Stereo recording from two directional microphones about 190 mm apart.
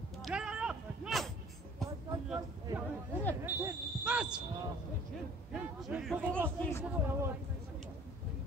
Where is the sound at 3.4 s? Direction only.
10° right (ahead or behind).